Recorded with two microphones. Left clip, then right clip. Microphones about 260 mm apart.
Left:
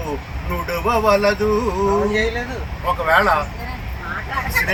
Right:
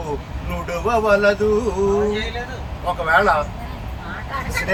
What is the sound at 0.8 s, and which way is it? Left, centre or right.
Speech, centre.